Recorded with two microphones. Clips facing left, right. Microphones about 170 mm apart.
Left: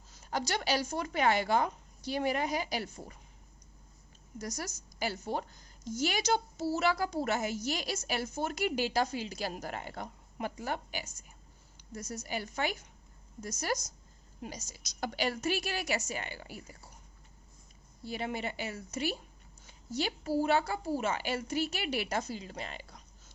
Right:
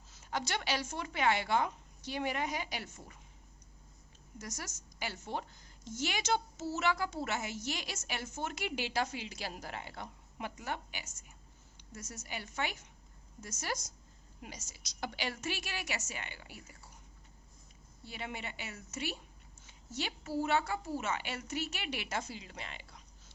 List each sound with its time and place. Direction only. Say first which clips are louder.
0.3 s a woman's voice: left 4 dB; 40° left (ahead or behind)
4.4 s a woman's voice: left 6 dB; 35° left (ahead or behind)
18.0 s a woman's voice: left 7 dB; 40° left (ahead or behind)